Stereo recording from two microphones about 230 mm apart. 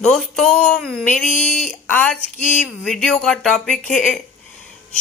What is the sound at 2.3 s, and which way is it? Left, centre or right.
Speech, left.